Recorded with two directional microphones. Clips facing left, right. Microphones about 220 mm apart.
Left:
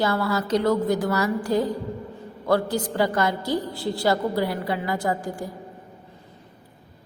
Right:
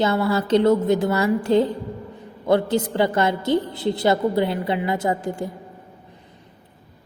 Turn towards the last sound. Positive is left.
turn(degrees=-25)  # may be behind; listen again after turning